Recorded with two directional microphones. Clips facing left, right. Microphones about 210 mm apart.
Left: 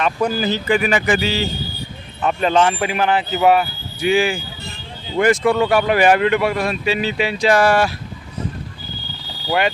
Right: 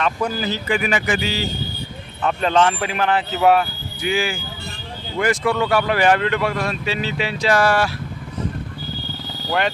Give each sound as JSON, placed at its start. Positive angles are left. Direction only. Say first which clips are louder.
{"t": 0.0, "sound": "speech", "louder": "left 3 dB", "side_deg": 20}
{"t": 0.7, "sound": "speech", "louder": "left 3 dB", "side_deg": 40}
{"t": 2.2, "sound": "speech", "louder": "left 1 dB", "side_deg": 5}
{"t": 4.0, "sound": "speech", "louder": "left 5 dB", "side_deg": 20}
{"t": 9.5, "sound": "speech", "louder": "left 3 dB", "side_deg": 10}